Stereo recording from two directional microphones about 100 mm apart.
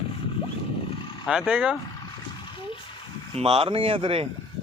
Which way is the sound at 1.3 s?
5° right (ahead or behind).